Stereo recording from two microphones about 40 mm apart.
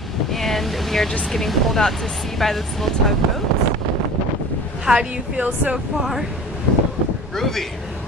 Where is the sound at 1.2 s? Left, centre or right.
Centre.